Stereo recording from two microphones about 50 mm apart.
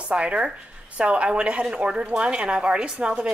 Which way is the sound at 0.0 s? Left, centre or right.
Right.